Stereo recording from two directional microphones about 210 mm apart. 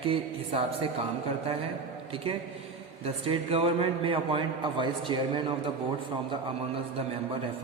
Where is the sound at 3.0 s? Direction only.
25° right (ahead or behind).